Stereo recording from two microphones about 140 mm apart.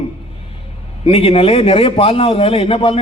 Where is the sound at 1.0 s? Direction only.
45° left (ahead or behind).